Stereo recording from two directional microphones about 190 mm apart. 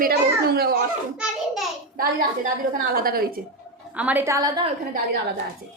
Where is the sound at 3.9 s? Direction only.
10° right (ahead or behind).